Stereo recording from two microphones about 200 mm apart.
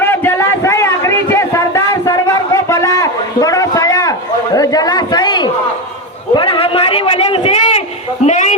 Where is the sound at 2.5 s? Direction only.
15° left (ahead or behind).